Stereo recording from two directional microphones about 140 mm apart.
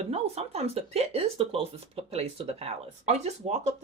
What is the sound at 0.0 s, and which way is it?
Speech, 50° right (ahead or behind).